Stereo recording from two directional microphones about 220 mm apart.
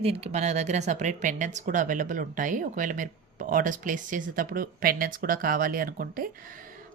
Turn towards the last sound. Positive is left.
turn(degrees=-40)  # may be behind; listen again after turning